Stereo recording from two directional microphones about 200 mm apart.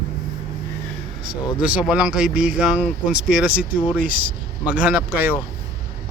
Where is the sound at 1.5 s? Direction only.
5° right (ahead or behind).